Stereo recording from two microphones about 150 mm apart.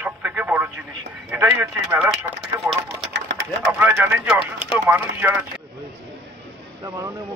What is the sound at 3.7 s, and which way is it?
Speech, 15° right (ahead or behind).